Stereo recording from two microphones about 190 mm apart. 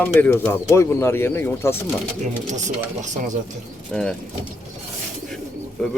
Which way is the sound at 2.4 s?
40° right (ahead or behind).